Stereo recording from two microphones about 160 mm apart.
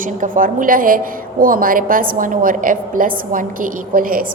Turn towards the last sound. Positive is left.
turn(degrees=-60)  # may be behind; listen again after turning